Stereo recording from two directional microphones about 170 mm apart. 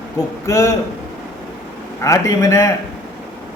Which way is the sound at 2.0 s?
20° left (ahead or behind).